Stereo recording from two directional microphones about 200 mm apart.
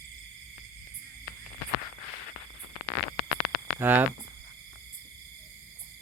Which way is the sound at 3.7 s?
10° right (ahead or behind).